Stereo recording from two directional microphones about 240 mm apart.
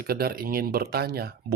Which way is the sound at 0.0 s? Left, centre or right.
Right.